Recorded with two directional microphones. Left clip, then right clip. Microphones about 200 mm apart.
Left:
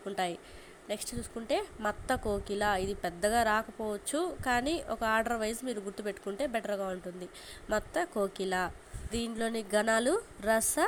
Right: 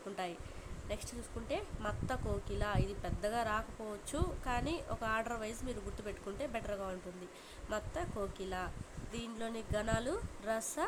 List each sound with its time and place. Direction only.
0.2 s a woman's voice: 20° left (ahead or behind)